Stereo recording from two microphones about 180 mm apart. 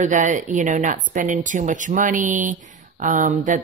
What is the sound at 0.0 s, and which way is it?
Speech, 45° right (ahead or behind).